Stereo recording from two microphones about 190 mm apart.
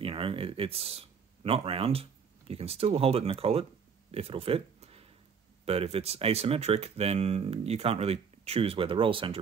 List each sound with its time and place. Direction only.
0.0 s speech: 30° right (ahead or behind)
4.1 s a sound: 30° right (ahead or behind)
5.7 s speech: 30° right (ahead or behind)